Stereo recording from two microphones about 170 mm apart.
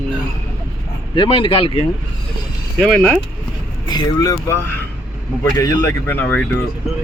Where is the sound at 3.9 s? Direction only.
25° left (ahead or behind).